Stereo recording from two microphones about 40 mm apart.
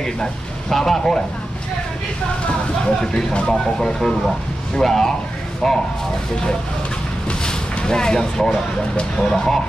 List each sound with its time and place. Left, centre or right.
0.0 s speech: centre
3.0 s speech: centre
7.2 s vehicle: left
9.3 s speech: centre